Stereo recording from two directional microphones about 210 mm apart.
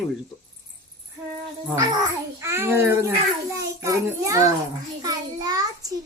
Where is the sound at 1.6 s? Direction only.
15° right (ahead or behind).